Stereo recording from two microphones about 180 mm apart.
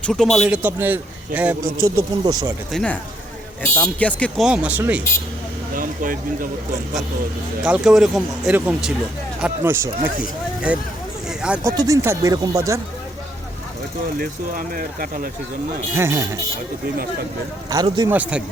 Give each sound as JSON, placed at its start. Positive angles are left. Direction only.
{"t": 0.0, "sound": "speech", "side_deg": 5}
{"t": 0.4, "sound": "speech", "side_deg": -10}
{"t": 1.8, "sound": "speech", "side_deg": -20}
{"t": 2.7, "sound": "speech", "side_deg": 5}
{"t": 4.4, "sound": "speech", "side_deg": -5}
{"t": 5.7, "sound": "speech", "side_deg": -50}
{"t": 7.6, "sound": "speech", "side_deg": -5}
{"t": 11.3, "sound": "a sound", "side_deg": -5}
{"t": 11.6, "sound": "speech", "side_deg": -20}
{"t": 14.2, "sound": "speech", "side_deg": -50}
{"t": 16.0, "sound": "speech", "side_deg": -15}
{"t": 17.7, "sound": "speech", "side_deg": -20}
{"t": 18.1, "sound": "speech", "side_deg": -5}